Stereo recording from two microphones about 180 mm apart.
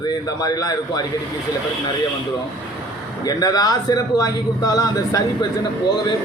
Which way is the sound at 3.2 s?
20° left (ahead or behind).